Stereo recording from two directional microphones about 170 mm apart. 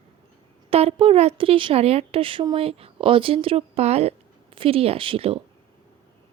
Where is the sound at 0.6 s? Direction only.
35° right (ahead or behind).